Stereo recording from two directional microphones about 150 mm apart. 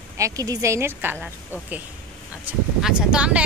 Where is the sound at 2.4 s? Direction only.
5° right (ahead or behind).